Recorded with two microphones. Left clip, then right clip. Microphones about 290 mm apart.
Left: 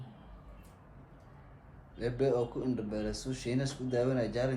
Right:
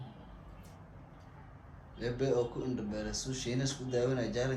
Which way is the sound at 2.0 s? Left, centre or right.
Left.